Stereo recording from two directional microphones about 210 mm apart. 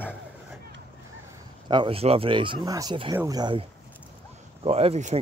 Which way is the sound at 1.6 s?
20° right (ahead or behind).